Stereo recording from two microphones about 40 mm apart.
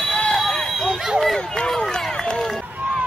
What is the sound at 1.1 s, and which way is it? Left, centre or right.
Speech, centre.